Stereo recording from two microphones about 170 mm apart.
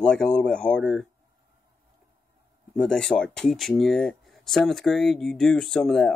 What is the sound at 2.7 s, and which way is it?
Speech, 5° left (ahead or behind).